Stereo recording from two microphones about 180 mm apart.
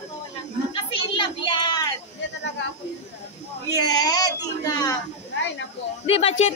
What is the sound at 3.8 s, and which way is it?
Speech, 20° left (ahead or behind).